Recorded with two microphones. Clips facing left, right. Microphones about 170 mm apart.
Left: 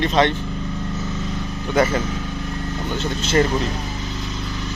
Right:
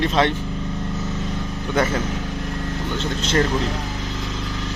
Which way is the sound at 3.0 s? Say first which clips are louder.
Left 2 dB; 10° left (ahead or behind).